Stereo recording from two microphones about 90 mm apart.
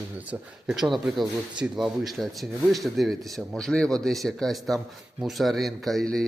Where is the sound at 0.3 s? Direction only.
5° right (ahead or behind).